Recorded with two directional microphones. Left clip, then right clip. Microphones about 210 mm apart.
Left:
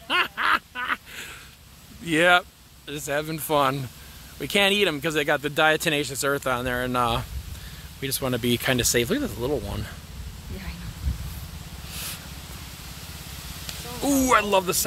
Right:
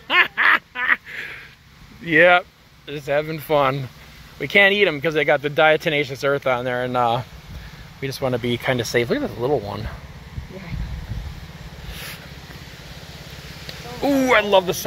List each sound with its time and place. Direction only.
0.1 s quack: 10° left (ahead or behind)
2.0 s speech: 20° left (ahead or behind)
14.2 s speech: 15° left (ahead or behind)